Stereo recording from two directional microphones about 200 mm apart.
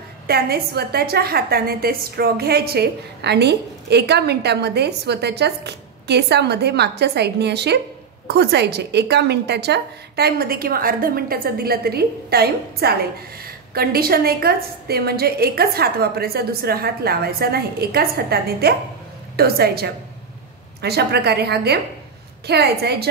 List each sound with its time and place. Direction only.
0.3 s a woman's voice: 50° right (ahead or behind)